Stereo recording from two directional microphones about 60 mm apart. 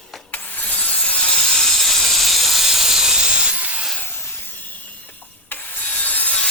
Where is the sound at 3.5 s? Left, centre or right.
Right.